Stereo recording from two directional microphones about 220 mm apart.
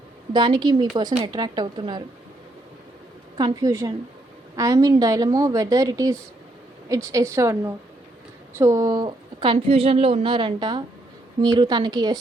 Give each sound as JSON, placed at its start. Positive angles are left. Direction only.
{"t": 0.3, "sound": "a woman's voice", "side_deg": -20}
{"t": 3.3, "sound": "a woman's voice", "side_deg": -15}